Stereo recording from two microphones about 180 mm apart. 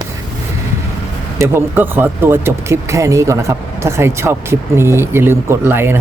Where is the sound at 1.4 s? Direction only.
10° right (ahead or behind).